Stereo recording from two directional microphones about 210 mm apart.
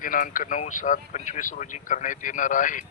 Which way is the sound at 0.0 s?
40° left (ahead or behind).